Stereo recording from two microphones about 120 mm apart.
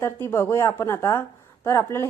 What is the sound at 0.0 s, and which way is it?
A woman's voice, 20° left (ahead or behind).